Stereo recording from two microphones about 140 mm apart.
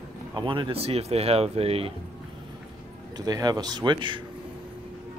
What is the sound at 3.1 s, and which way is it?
Speech, 25° right (ahead or behind).